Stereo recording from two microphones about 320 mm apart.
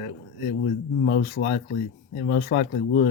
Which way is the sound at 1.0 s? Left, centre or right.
Left.